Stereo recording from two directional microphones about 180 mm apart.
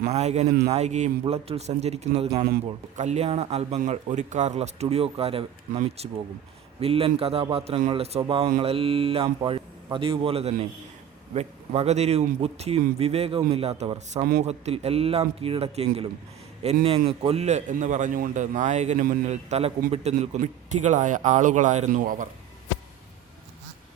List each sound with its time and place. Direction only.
0.0 s a man's voice: 35° right (ahead or behind)